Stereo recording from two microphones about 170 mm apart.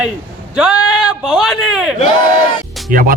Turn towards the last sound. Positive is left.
turn(degrees=-55)  # may be behind; listen again after turning